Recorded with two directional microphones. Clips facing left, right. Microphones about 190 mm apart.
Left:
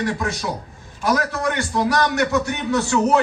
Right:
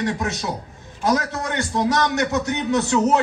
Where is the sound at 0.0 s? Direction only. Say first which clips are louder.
Even; 20° right (ahead or behind).